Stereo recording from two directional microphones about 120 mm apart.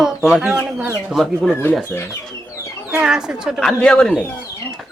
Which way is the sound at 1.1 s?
Centre (ahead or behind).